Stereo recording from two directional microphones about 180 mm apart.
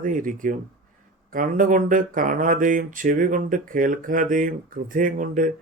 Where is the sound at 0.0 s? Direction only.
45° right (ahead or behind).